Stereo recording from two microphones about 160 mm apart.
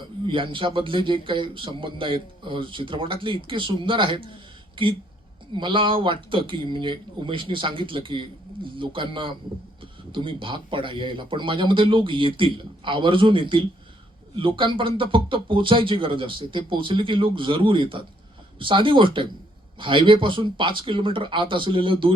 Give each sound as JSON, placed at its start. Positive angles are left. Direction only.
{"t": 0.3, "sound": "speech", "side_deg": -30}